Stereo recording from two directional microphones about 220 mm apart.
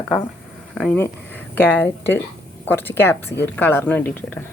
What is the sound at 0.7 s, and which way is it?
Speech, 5° left (ahead or behind).